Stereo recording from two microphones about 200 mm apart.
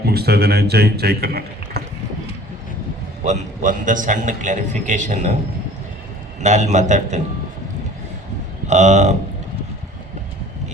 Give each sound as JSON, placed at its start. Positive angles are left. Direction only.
{"t": 0.0, "sound": "a man's voice", "side_deg": -55}
{"t": 3.2, "sound": "a man's voice", "side_deg": -40}
{"t": 6.4, "sound": "a man's voice", "side_deg": -35}
{"t": 8.6, "sound": "a man's voice", "side_deg": -35}